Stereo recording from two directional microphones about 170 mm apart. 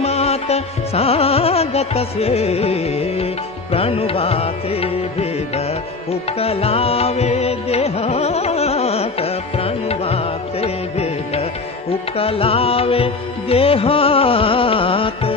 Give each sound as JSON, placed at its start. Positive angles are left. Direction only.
{"t": 0.0, "sound": "music", "side_deg": 40}
{"t": 6.4, "sound": "carnatic music", "side_deg": 35}
{"t": 12.2, "sound": "music", "side_deg": 35}